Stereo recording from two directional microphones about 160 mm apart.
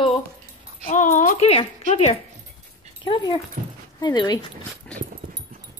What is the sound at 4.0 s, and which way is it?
Speech, 25° left (ahead or behind).